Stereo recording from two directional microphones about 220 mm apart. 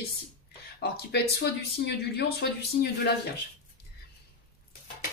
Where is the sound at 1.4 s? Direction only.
50° left (ahead or behind).